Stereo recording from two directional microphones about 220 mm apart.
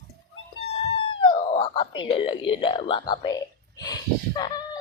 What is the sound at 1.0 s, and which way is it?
Whispering, 25° left (ahead or behind).